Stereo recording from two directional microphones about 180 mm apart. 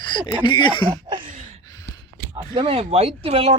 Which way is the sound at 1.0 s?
25° right (ahead or behind).